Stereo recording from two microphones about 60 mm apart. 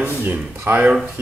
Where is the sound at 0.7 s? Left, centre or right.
Right.